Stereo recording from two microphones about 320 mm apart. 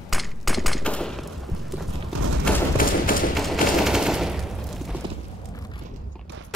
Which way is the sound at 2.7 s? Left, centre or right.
Left.